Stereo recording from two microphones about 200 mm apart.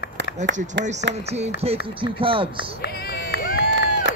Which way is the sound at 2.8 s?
55° left (ahead or behind).